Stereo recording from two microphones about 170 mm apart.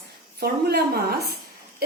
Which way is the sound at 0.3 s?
70° right (ahead or behind).